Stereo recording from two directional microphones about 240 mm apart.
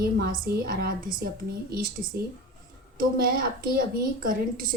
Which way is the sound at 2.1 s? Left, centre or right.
Right.